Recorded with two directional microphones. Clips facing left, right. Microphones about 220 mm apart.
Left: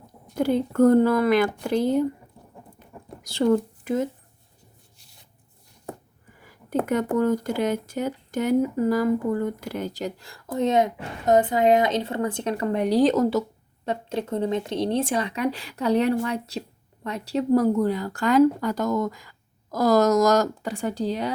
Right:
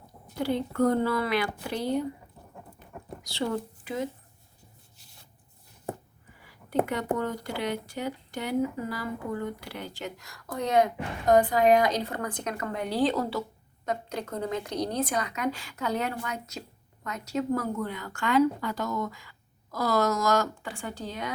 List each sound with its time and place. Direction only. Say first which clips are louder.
0.3 s a woman's voice: left 6 dB; 50° left (ahead or behind)
3.3 s speech: left 10 dB; 45° left (ahead or behind)
6.4 s a sound: left 6 dB; 45° left (ahead or behind)
6.8 s a woman's voice: left 7 dB; 45° left (ahead or behind)
13.8 s a woman's voice: left 5 dB; 30° left (ahead or behind)